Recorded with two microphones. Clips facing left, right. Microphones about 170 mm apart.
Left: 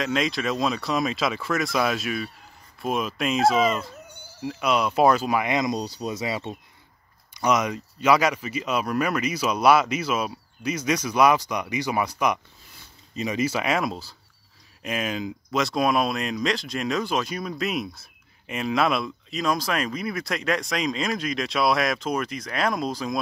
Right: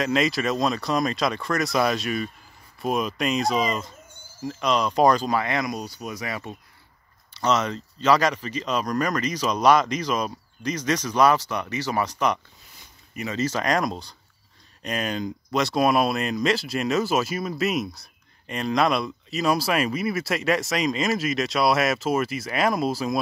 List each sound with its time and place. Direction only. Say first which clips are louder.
0.0 s speech: right 2 dB; centre (ahead or behind)
4.1 s insect: left 1 dB; 70° left (ahead or behind)
4.5 s speech: even; 10° left (ahead or behind)
5.8 s speech: left 4 dB; 30° left (ahead or behind)
7.3 s speech: even; 10° left (ahead or behind); by 23.1 s 5° right (ahead or behind)